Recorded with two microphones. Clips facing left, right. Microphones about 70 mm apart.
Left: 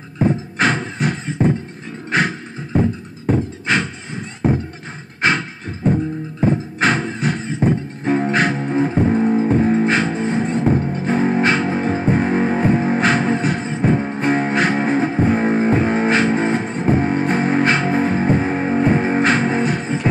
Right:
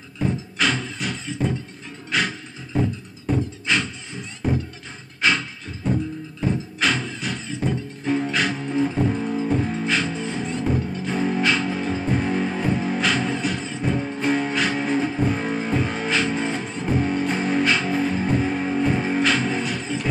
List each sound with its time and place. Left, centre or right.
0.2 s beatboxing: left
5.2 s beatboxing: left
6.4 s music: left